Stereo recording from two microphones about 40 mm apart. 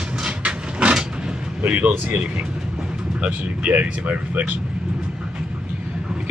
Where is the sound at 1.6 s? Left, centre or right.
Right.